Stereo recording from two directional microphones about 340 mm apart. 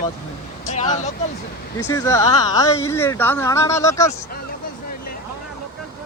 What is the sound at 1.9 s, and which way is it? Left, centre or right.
Speech, centre.